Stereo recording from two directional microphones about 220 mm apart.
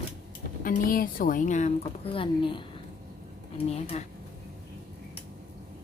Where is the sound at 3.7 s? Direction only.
30° left (ahead or behind).